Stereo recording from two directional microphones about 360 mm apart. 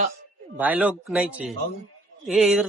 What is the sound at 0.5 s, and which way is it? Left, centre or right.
Speech, centre.